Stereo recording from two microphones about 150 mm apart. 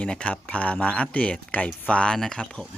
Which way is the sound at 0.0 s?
5° left (ahead or behind).